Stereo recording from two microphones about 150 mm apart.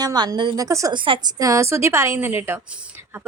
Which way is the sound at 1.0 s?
35° right (ahead or behind).